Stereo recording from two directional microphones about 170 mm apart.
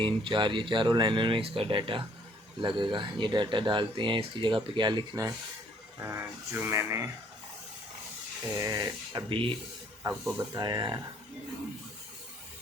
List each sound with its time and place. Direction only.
0.0 s speech: 25° right (ahead or behind)
8.5 s speech: 20° right (ahead or behind)
10.0 s speech: 15° right (ahead or behind)